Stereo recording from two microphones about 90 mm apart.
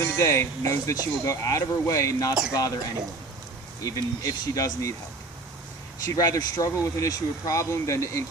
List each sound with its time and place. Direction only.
0.0 s speech: 35° left (ahead or behind)
3.8 s speech: 40° left (ahead or behind)
6.1 s speech: 40° left (ahead or behind)